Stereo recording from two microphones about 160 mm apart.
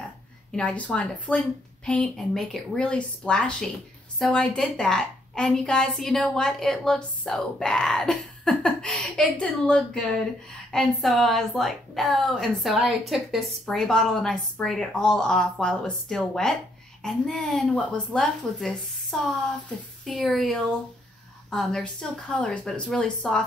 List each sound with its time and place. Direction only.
0.5 s a woman's voice: 5° left (ahead or behind)